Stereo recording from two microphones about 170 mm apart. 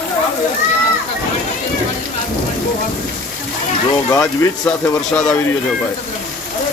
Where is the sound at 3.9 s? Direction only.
20° left (ahead or behind).